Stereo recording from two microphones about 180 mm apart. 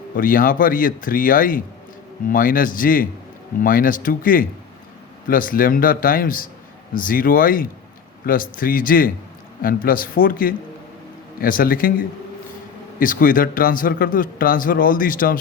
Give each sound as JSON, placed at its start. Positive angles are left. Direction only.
{"t": 0.2, "sound": "speech", "side_deg": 50}